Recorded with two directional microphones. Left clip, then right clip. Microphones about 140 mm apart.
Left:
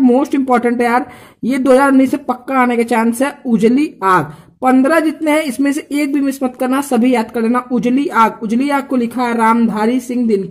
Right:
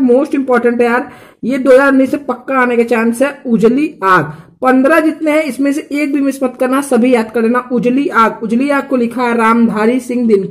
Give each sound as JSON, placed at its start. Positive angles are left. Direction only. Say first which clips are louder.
{"t": 0.0, "sound": "speech", "louder": "right 2 dB", "side_deg": 45}